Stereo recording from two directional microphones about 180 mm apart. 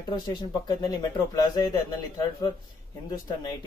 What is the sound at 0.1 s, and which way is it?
Speech, 20° left (ahead or behind).